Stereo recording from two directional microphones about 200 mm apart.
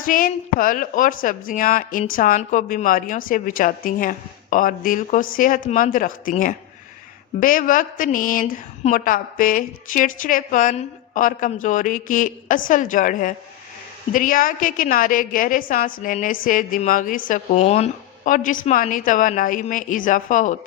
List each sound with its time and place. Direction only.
0.0 s a woman's voice: 45° left (ahead or behind)